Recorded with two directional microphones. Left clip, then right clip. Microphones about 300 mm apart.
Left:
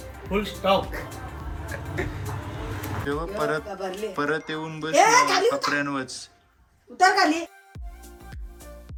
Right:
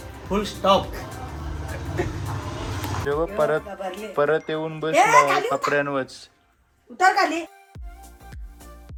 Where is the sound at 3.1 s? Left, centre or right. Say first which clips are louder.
Right 5 dB; centre.